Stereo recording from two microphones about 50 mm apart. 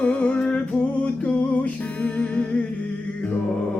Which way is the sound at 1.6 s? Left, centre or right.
Left.